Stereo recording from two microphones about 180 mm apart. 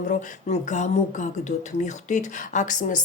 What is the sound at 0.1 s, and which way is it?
Speech, 40° left (ahead or behind).